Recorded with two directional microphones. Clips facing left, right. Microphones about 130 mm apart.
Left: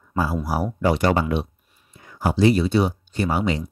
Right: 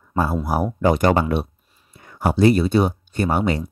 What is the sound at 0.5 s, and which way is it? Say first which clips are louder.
Speech: right 3 dB; 50° right (ahead or behind).